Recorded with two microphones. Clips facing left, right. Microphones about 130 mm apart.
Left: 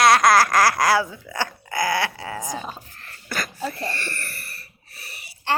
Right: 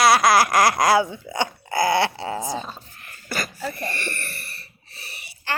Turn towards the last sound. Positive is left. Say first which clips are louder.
# right 1 dB
turn(degrees=-25)  # may be behind; listen again after turning